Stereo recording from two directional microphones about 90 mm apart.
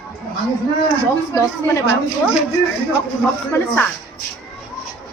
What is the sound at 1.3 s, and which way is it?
Speech, 30° left (ahead or behind).